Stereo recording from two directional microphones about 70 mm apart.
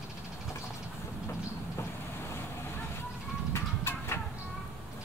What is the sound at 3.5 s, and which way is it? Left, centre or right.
Vehicle, left.